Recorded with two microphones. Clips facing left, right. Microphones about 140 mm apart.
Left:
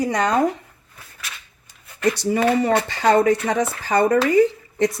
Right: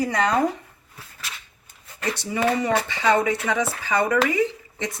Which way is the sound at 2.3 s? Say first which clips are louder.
Left 2 dB; 35° left (ahead or behind).